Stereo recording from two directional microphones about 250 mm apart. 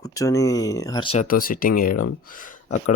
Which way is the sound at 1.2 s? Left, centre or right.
Left.